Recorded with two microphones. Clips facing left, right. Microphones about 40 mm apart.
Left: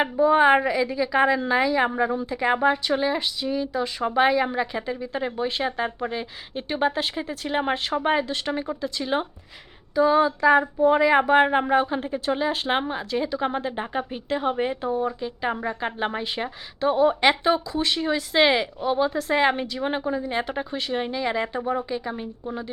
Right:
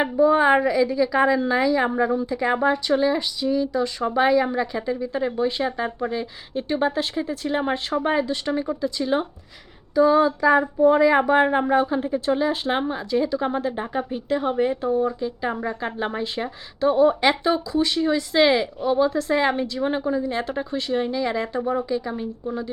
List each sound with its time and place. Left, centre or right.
0.0 s a woman's voice: centre